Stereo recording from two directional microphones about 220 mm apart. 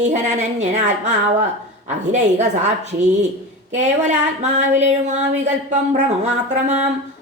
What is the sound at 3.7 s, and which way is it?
Speech, 30° right (ahead or behind).